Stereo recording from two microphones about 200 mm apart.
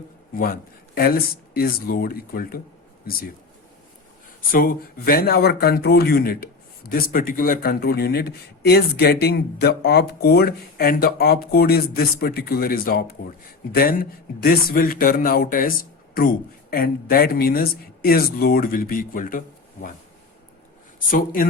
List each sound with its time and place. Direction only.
0.3 s speech: 45° left (ahead or behind)
4.5 s speech: 45° left (ahead or behind)